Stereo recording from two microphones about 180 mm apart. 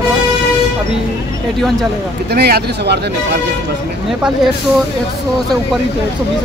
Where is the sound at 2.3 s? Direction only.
65° right (ahead or behind).